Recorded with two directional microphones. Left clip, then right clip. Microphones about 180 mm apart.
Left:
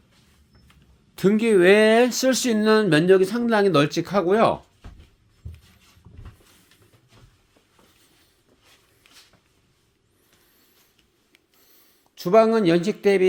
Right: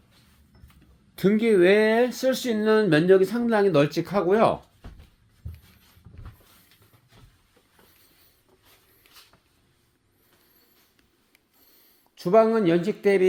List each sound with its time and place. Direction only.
1.1 s speech: 20° left (ahead or behind)
11.7 s speech: 15° left (ahead or behind)